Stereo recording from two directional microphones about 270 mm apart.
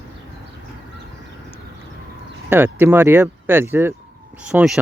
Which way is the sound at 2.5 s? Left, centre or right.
Centre.